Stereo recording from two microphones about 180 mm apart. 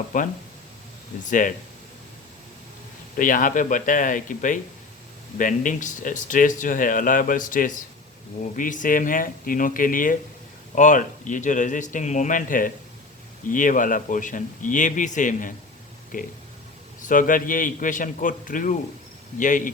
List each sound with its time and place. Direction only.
0.1 s speech: 45° left (ahead or behind)
3.2 s speech: 50° left (ahead or behind)